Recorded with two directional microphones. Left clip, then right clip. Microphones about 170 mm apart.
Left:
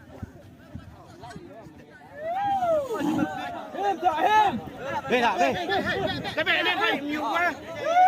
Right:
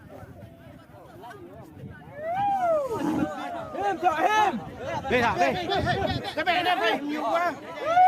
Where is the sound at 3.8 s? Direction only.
15° left (ahead or behind).